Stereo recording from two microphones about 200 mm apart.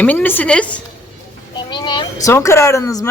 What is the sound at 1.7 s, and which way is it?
A child's voice, 25° left (ahead or behind).